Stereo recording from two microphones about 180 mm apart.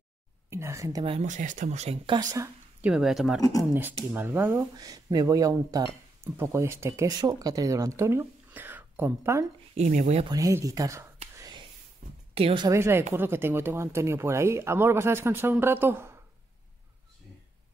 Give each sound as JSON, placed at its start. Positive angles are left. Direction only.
{"t": 0.5, "sound": "speech", "side_deg": -15}
{"t": 1.2, "sound": "speech", "side_deg": -45}
{"t": 2.1, "sound": "speech", "side_deg": -20}
{"t": 2.9, "sound": "speech", "side_deg": -5}
{"t": 9.8, "sound": "speech", "side_deg": -40}
{"t": 10.2, "sound": "speech", "side_deg": -20}
{"t": 11.3, "sound": "whispering", "side_deg": -20}
{"t": 12.0, "sound": "a sound", "side_deg": -45}
{"t": 12.4, "sound": "speech", "side_deg": -30}
{"t": 12.6, "sound": "speech", "side_deg": -15}